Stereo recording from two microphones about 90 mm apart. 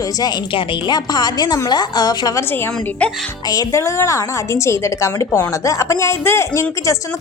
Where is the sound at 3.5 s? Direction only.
40° left (ahead or behind).